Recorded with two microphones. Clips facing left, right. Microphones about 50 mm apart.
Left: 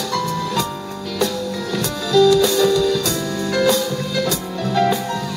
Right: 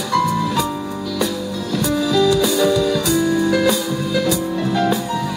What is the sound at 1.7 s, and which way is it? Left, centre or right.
Music, centre.